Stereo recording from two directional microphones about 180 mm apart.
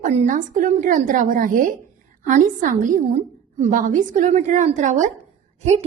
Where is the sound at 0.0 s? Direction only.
40° right (ahead or behind).